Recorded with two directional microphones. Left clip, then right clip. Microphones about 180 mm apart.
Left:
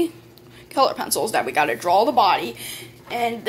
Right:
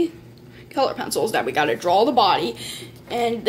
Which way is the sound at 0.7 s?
5° right (ahead or behind).